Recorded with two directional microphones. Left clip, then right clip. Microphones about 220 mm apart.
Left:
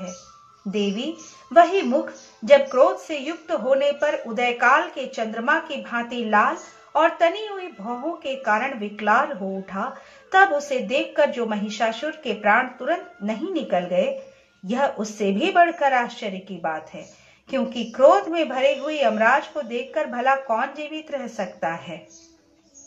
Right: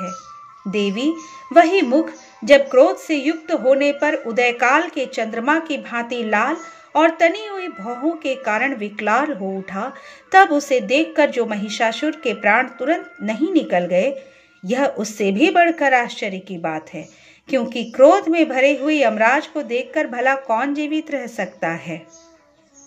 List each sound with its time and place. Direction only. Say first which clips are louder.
0.7 s a woman's voice: right 5 dB; 35° right (ahead or behind)
10.3 s a woman's voice: right 5 dB; 35° right (ahead or behind)
17.9 s a woman's voice: right 4 dB; 40° right (ahead or behind)